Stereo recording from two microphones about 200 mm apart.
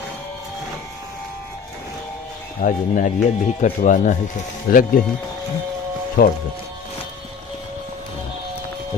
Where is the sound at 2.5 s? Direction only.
40° left (ahead or behind).